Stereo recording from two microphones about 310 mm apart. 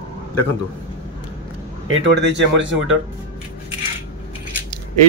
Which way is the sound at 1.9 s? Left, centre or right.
Right.